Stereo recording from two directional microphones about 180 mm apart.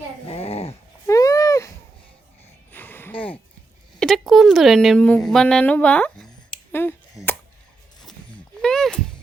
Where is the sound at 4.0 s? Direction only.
Centre (ahead or behind).